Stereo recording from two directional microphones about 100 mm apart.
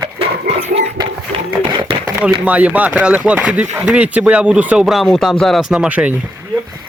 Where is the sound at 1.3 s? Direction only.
65° right (ahead or behind).